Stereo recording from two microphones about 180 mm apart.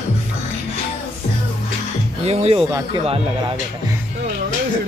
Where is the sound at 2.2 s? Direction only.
35° right (ahead or behind).